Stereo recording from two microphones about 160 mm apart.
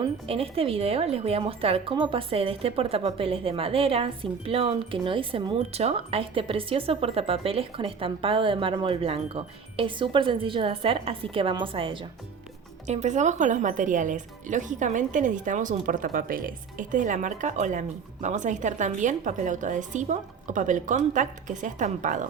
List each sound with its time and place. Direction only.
0.0 s speech: 35° right (ahead or behind)
12.9 s speech: 45° right (ahead or behind)